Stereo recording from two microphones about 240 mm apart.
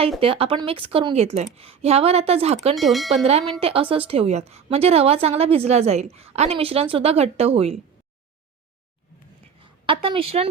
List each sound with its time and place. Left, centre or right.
0.2 s a woman's voice: right
2.7 s speech: centre
3.6 s a woman's voice: right
9.6 s a woman's voice: right